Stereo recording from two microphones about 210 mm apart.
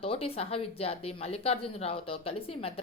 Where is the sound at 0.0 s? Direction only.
25° left (ahead or behind).